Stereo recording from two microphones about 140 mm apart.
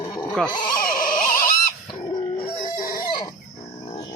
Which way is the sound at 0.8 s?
90° left.